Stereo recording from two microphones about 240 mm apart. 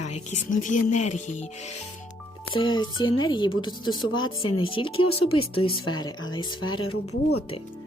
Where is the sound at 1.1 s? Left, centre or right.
Left.